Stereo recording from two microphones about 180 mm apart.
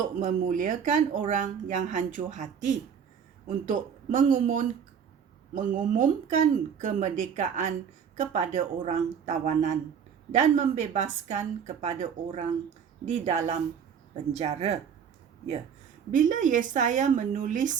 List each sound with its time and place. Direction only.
0.2 s a woman's voice: 45° right (ahead or behind)
16.1 s speech: 45° right (ahead or behind)